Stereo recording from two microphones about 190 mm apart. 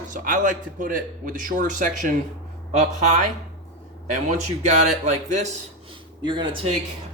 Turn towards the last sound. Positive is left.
turn(degrees=-25)  # may be behind; listen again after turning